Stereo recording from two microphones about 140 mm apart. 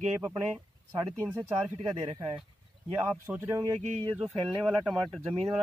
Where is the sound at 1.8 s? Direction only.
30° right (ahead or behind).